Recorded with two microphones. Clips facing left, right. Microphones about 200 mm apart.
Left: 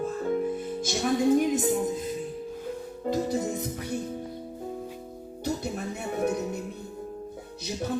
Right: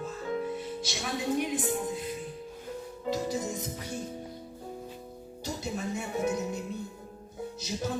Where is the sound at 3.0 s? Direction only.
55° left (ahead or behind).